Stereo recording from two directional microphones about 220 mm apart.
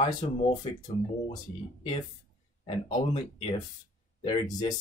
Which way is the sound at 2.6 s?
25° left (ahead or behind).